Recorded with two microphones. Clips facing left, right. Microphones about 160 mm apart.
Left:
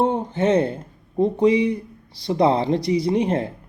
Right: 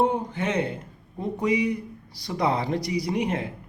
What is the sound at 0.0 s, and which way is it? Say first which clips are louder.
Speech: left 4 dB; 25° left (ahead or behind).